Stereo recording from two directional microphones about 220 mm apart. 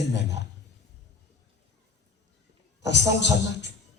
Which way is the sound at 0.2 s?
50° left (ahead or behind).